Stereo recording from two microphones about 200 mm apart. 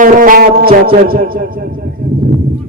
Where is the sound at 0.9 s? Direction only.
45° right (ahead or behind).